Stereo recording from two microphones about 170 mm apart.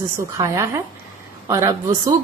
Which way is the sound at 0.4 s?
15° right (ahead or behind).